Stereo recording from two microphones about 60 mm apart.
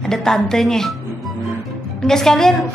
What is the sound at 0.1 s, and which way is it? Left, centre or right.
Speech, centre.